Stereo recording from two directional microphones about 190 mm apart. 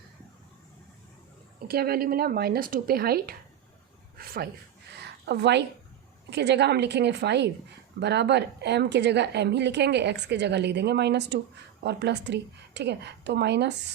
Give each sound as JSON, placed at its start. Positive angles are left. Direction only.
{"t": 1.6, "sound": "speech", "side_deg": -55}
{"t": 5.2, "sound": "a woman's voice", "side_deg": -60}